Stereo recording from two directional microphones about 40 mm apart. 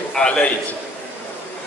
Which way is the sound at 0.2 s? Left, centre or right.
Left.